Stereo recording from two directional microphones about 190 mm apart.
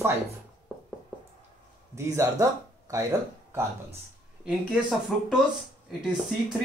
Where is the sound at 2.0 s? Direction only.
15° right (ahead or behind).